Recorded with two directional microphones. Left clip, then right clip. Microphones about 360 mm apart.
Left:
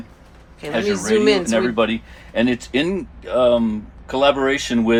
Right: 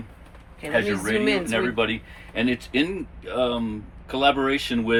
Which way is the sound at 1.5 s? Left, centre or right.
Left.